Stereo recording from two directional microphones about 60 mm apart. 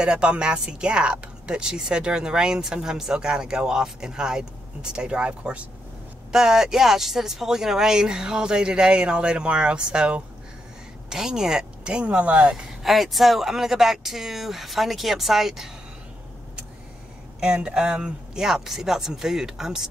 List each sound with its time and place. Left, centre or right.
0.0 s speech: centre
6.3 s speech: centre
17.4 s speech: centre